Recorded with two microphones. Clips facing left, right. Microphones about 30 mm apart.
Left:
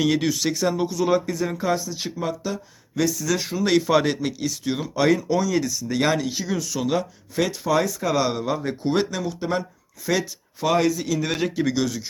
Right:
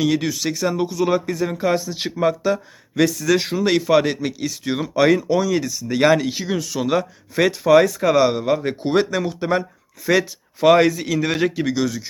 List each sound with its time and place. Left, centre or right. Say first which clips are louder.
0.0 s speech: right 1 dB; centre
1.7 s speech: right 3 dB; right
3.0 s speech: right 5 dB; right
3.6 s speech: left 1 dB; centre
7.3 s speech: right 8 dB; right
8.0 s speech: right 6 dB; centre
8.4 s speech: right 4 dB; right; by 12.0 s centre